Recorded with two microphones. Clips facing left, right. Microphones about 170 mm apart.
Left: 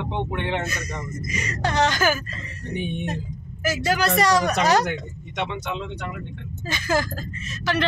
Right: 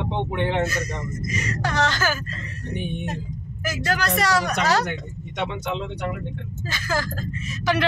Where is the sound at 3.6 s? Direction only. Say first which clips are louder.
Left 3 dB; 5° left (ahead or behind).